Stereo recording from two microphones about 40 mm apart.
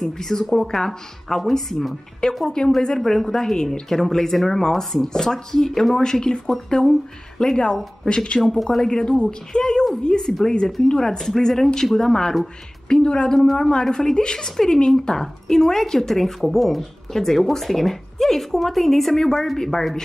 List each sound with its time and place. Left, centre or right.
0.0 s a woman's voice: centre
2.4 s a woman's voice: centre
8.4 s a woman's voice: centre
8.8 s a woman's voice: left
12.8 s a woman's voice: left; by 20.0 s centre